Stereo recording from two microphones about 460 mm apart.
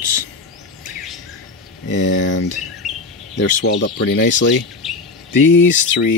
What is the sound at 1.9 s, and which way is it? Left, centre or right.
Speech, left.